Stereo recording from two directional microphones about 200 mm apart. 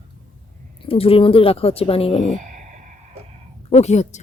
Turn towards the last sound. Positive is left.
turn(degrees=35)  # may be behind; listen again after turning